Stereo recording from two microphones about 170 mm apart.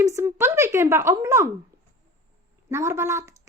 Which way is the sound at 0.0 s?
15° right (ahead or behind).